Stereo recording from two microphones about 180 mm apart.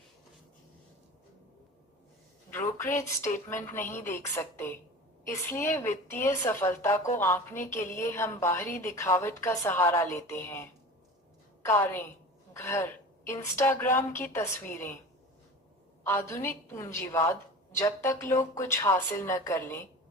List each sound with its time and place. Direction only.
2.5 s speech: 15° left (ahead or behind)
16.0 s speech: 15° left (ahead or behind)